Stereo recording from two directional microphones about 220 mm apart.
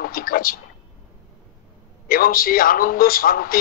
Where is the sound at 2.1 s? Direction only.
40° left (ahead or behind).